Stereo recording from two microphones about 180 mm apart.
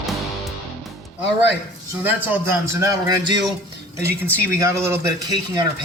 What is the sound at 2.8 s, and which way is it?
Speech, 25° right (ahead or behind).